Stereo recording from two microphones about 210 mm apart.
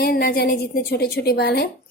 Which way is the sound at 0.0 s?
45° left (ahead or behind).